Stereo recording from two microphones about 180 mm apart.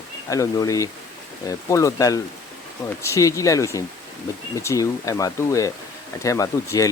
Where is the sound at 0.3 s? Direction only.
20° left (ahead or behind).